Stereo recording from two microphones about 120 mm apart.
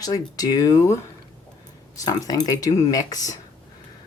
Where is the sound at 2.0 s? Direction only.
30° left (ahead or behind).